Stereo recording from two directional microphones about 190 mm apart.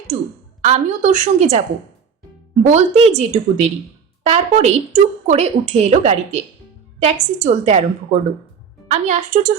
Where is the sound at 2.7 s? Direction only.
35° right (ahead or behind).